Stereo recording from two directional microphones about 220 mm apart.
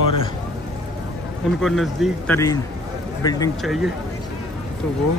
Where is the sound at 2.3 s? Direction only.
15° left (ahead or behind).